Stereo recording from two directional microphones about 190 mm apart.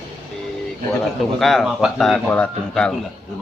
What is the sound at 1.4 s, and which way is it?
Speech, centre (ahead or behind).